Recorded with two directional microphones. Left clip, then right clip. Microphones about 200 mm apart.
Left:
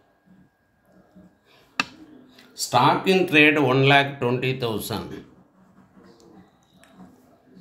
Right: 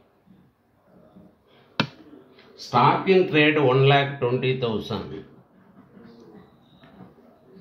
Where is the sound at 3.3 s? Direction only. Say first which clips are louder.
Left 2 dB; 40° left (ahead or behind).